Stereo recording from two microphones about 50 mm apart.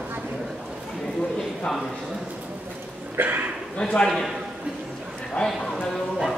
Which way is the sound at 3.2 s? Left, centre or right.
Right.